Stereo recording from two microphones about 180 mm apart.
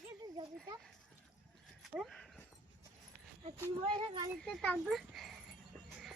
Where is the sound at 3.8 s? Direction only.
30° right (ahead or behind).